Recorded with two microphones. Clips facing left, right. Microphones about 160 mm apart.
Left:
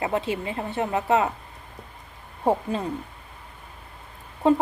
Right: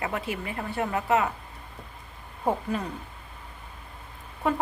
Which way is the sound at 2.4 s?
30° left (ahead or behind).